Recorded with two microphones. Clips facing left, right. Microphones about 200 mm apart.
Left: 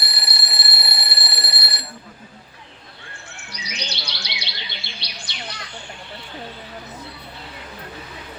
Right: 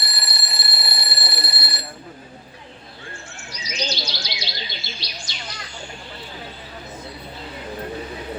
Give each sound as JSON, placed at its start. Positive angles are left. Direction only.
{"t": 0.0, "sound": "alarm", "side_deg": 65}
{"t": 3.5, "sound": "bird", "side_deg": 65}